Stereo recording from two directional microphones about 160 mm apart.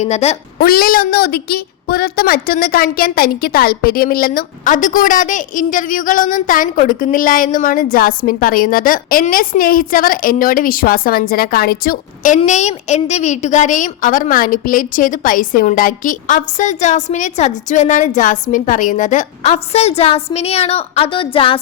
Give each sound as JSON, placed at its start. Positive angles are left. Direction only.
{"t": 0.0, "sound": "a woman's voice", "side_deg": 45}
{"t": 0.6, "sound": "a woman's voice", "side_deg": 70}
{"t": 12.4, "sound": "a woman's voice", "side_deg": 45}